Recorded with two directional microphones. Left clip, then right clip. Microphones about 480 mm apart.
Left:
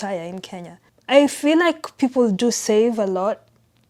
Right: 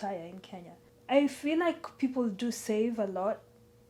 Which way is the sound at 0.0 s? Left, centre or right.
Left.